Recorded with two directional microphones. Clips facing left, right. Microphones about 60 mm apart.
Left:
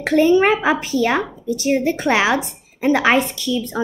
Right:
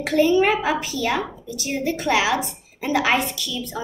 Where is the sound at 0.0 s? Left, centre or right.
Left.